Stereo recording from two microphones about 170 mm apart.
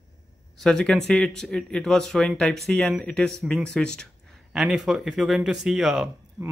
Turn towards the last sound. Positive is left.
turn(degrees=-5)  # may be behind; listen again after turning